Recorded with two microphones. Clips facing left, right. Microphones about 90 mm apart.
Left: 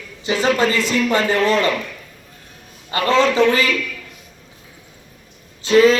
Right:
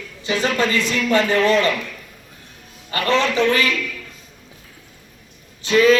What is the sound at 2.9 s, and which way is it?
Speech, 35° left (ahead or behind).